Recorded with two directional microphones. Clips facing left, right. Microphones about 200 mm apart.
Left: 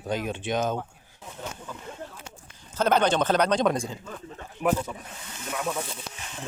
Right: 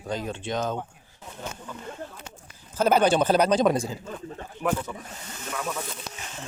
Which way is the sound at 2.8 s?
10° right (ahead or behind).